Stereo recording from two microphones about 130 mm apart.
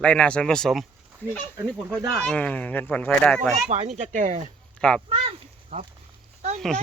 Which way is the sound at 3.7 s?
60° right (ahead or behind).